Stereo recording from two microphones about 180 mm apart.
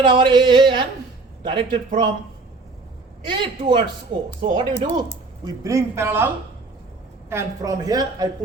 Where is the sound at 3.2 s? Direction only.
25° right (ahead or behind).